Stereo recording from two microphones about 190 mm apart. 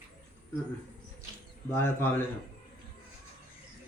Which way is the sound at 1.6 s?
15° left (ahead or behind).